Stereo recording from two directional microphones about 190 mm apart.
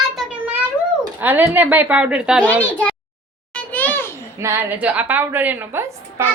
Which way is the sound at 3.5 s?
10° left (ahead or behind).